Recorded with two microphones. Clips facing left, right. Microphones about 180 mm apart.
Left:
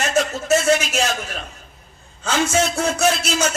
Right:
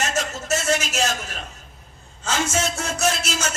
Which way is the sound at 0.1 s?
60° left (ahead or behind).